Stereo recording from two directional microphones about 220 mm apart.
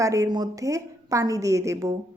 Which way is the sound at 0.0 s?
15° right (ahead or behind).